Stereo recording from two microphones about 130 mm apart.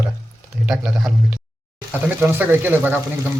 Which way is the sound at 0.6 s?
5° right (ahead or behind).